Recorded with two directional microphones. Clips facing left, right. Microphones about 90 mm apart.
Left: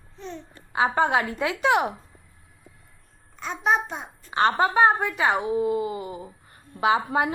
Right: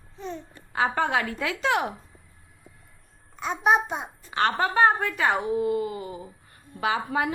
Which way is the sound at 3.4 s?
10° right (ahead or behind).